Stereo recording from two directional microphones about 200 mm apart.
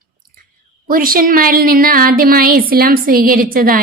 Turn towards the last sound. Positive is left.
turn(degrees=-45)  # may be behind; listen again after turning